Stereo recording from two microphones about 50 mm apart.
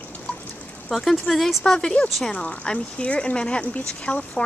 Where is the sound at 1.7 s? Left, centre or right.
Centre.